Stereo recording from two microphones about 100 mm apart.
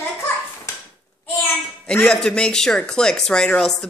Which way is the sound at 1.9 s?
10° left (ahead or behind).